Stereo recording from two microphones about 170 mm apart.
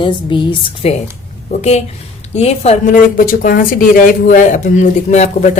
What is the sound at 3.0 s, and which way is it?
Speech, 55° left (ahead or behind).